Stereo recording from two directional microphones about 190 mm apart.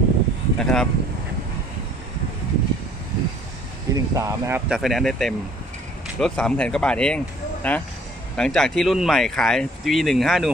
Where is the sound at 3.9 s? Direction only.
15° right (ahead or behind).